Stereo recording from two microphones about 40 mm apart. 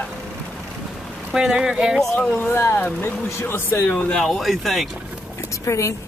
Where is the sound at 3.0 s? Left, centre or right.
Left.